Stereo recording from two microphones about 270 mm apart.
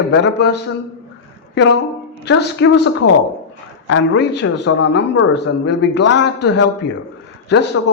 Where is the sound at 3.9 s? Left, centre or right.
Left.